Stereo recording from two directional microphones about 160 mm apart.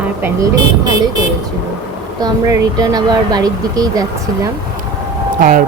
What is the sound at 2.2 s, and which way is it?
A man's voice, 25° right (ahead or behind).